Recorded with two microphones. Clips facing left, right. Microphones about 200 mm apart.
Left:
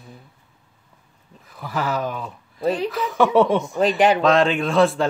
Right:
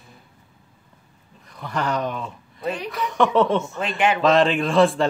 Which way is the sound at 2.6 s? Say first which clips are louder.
Left 6 dB; 30° left (ahead or behind).